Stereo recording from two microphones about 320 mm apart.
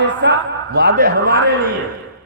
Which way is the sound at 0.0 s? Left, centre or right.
Right.